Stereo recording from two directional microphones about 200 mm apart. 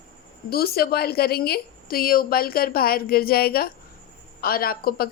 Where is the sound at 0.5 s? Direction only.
50° left (ahead or behind).